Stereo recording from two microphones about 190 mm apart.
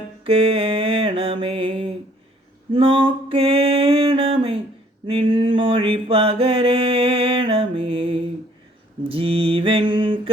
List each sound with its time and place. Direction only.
0.3 s mantra: 30° right (ahead or behind)
2.7 s music: 30° right (ahead or behind)
5.0 s mantra: 25° right (ahead or behind)